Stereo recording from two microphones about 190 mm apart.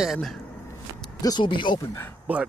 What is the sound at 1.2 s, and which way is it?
Speech, 25° left (ahead or behind).